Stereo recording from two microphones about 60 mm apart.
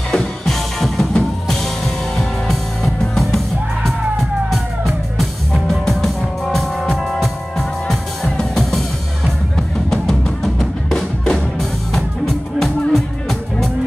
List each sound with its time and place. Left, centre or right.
0.1 s music: centre
5.5 s music: centre